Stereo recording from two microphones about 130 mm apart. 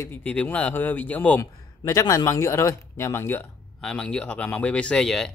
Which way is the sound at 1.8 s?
25° left (ahead or behind).